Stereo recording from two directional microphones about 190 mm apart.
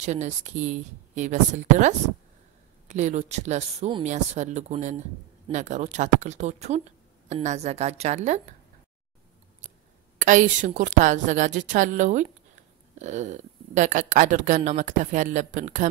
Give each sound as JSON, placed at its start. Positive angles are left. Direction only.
{"t": 0.0, "sound": "speech", "side_deg": -35}
{"t": 10.1, "sound": "speech", "side_deg": -45}